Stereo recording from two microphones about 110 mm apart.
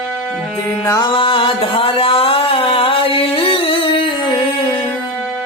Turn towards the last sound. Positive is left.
turn(degrees=50)  # may be behind; listen again after turning